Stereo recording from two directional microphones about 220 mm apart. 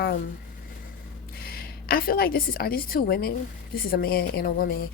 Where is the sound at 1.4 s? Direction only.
45° left (ahead or behind).